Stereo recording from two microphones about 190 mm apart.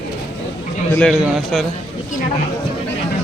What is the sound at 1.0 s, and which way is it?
Speech, centre (ahead or behind).